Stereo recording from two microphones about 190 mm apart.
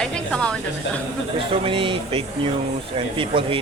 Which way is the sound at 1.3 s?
30° right (ahead or behind).